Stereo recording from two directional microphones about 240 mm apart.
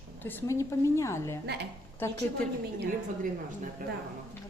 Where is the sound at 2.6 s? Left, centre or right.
Right.